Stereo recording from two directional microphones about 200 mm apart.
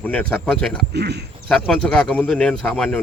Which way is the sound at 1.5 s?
5° left (ahead or behind).